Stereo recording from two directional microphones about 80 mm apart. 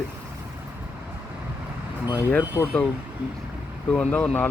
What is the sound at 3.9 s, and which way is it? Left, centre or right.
Speech, centre.